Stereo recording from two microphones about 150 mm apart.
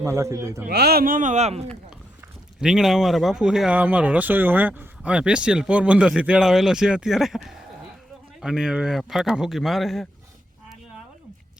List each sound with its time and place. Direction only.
0.0 s a man's voice: 20° right (ahead or behind)
0.7 s speech: 90° right; by 1.6 s 45° right (ahead or behind)
2.6 s speech: 5° right (ahead or behind)